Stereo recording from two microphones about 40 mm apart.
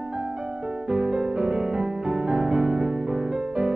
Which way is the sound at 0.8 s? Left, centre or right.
Centre.